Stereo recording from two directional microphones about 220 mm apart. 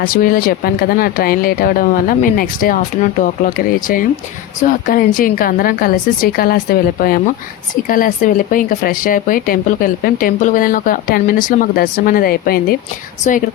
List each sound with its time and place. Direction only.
0.0 s speech: 40° left (ahead or behind)